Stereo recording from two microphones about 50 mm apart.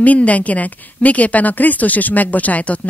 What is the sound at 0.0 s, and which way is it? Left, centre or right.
Speech, left.